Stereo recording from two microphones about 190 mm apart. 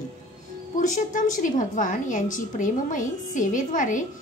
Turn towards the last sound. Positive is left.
turn(degrees=40)  # may be behind; listen again after turning